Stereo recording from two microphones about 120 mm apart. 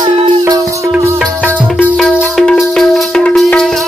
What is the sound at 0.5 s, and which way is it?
Music, 25° right (ahead or behind).